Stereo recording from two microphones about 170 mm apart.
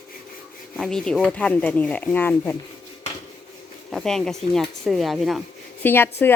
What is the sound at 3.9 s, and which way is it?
Speech, centre (ahead or behind).